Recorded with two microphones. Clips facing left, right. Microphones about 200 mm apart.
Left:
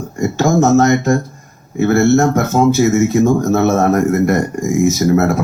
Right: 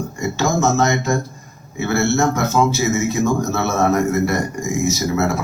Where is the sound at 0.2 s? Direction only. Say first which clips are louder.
Left 6 dB; 50° left (ahead or behind).